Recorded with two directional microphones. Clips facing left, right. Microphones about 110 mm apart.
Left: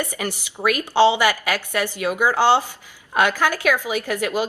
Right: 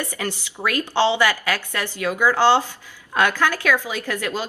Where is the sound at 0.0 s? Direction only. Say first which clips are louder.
Left 1 dB; 15° left (ahead or behind).